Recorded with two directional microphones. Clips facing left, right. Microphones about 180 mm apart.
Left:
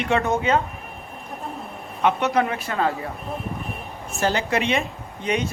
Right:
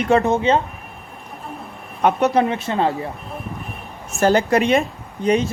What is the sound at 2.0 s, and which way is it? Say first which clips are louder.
Speech: right 4 dB; 40° right (ahead or behind).